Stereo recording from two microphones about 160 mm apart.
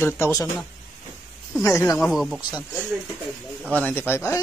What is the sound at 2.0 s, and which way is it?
Speech, centre (ahead or behind).